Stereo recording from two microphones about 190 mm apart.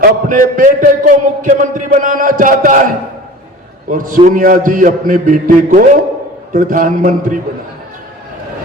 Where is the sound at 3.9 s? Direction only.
45° right (ahead or behind).